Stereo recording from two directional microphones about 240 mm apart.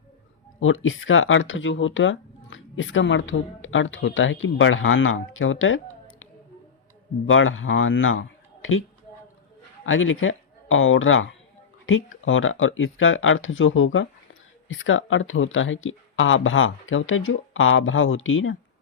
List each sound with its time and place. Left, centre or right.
0.6 s speech: left
7.3 s a woman's voice: left
9.8 s speech: left